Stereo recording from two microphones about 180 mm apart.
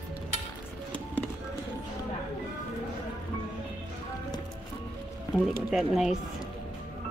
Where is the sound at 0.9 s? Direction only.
10° left (ahead or behind).